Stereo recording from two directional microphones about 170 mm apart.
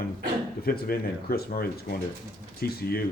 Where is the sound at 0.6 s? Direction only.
60° left (ahead or behind).